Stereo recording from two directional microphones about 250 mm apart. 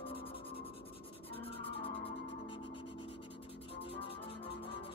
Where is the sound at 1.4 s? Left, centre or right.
Left.